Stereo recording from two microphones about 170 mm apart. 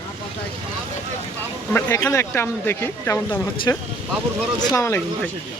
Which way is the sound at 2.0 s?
15° left (ahead or behind).